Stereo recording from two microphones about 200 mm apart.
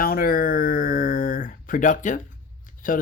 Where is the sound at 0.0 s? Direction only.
45° left (ahead or behind).